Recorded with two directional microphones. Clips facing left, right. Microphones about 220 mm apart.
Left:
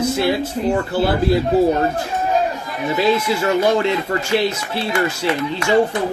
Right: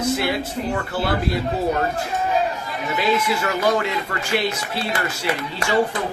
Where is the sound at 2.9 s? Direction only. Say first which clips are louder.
Left 4 dB; 30° left (ahead or behind).